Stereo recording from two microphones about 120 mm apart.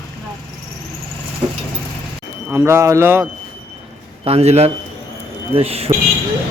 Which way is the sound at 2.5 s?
20° right (ahead or behind).